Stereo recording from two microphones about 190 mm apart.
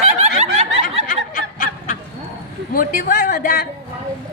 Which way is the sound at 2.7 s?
45° left (ahead or behind).